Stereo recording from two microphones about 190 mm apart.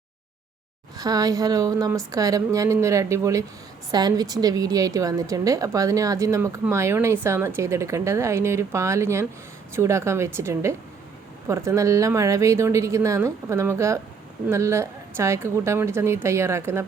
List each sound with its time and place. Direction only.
0.9 s a woman's voice: 20° right (ahead or behind)